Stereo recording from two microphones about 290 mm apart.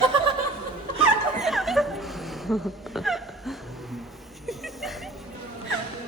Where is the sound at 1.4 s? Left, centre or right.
Centre.